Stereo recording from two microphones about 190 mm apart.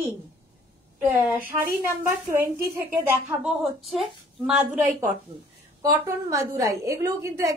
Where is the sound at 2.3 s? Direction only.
15° right (ahead or behind).